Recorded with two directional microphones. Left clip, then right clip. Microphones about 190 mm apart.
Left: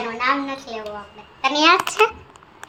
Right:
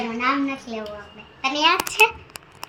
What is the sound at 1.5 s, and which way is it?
Speech, 40° left (ahead or behind).